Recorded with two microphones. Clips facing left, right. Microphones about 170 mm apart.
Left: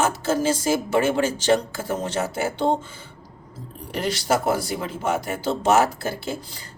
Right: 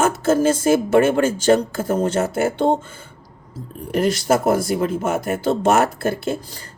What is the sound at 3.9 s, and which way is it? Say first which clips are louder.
Speech: right 5 dB; 50° right (ahead or behind).